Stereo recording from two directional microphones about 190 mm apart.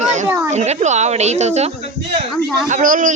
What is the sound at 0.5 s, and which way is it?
A woman's voice, 35° right (ahead or behind).